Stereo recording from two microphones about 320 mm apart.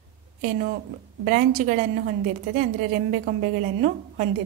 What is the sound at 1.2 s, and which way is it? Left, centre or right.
A woman's voice, right.